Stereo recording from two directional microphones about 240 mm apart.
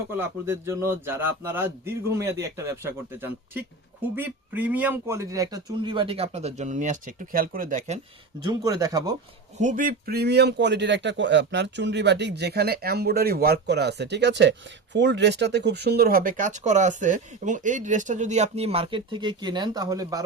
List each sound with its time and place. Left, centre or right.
0.2 s speech: centre; by 7.9 s right
8.4 s speech: centre
9.6 s a man's voice: right; by 20.2 s centre